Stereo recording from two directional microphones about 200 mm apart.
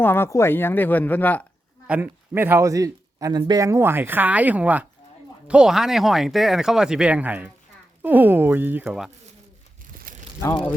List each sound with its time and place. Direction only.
0.0 s speech: 10° left (ahead or behind)
1.9 s speech: 10° right (ahead or behind)
10.1 s crumpling: 45° right (ahead or behind)
10.4 s speech: 25° left (ahead or behind)